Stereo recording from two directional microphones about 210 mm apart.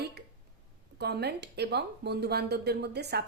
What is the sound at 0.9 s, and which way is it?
Speech, 50° right (ahead or behind).